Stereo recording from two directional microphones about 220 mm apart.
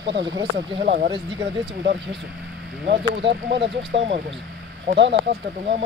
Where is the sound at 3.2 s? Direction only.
50° right (ahead or behind).